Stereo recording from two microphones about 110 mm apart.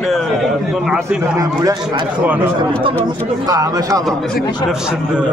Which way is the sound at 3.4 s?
30° right (ahead or behind).